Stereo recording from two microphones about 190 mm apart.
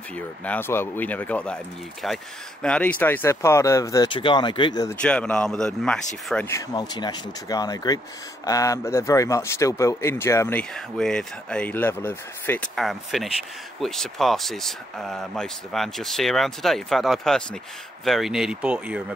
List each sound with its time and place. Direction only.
0.1 s speech: 10° left (ahead or behind)
5.0 s speech: 5° left (ahead or behind)